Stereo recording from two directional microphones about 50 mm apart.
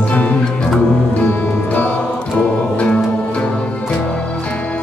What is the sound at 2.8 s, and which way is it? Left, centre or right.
Music, left.